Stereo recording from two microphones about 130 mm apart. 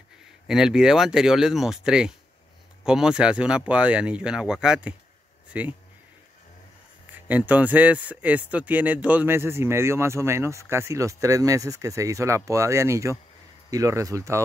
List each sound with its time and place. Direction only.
0.5 s speech: 5° right (ahead or behind)
7.2 s speech: 10° right (ahead or behind)